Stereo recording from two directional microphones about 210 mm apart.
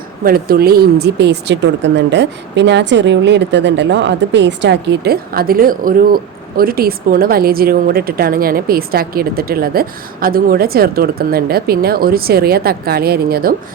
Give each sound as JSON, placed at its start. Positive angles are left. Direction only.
{"t": 0.3, "sound": "speech", "side_deg": -45}